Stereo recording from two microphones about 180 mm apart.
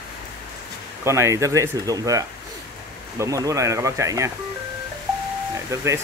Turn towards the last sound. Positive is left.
turn(degrees=-15)  # may be behind; listen again after turning